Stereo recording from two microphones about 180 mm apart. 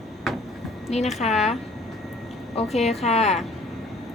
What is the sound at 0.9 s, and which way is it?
Speech, 35° left (ahead or behind).